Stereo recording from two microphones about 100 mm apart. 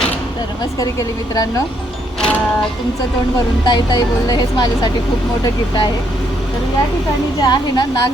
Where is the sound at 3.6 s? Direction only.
45° left (ahead or behind).